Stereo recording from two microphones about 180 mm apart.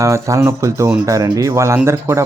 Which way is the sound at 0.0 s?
15° right (ahead or behind).